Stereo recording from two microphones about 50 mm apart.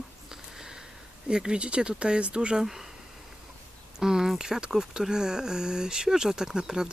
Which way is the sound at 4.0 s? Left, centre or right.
Centre.